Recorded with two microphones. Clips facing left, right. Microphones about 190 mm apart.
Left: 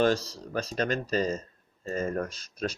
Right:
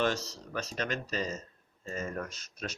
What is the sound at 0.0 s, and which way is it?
Speech, 35° left (ahead or behind).